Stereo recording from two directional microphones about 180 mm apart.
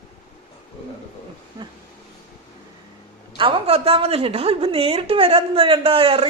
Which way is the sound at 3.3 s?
30° right (ahead or behind).